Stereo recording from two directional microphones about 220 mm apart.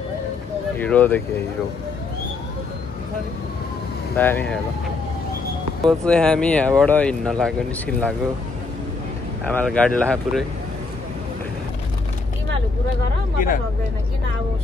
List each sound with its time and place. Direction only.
0.7 s speech: 5° left (ahead or behind)
4.2 s speech: 10° left (ahead or behind)
5.9 s speech: 5° left (ahead or behind)
9.5 s speech: 5° left (ahead or behind)